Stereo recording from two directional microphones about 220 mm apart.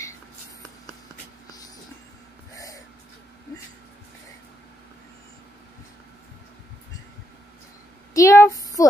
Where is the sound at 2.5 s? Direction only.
15° left (ahead or behind).